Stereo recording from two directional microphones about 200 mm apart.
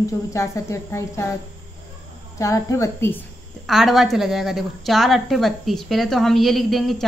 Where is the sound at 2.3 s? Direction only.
15° left (ahead or behind).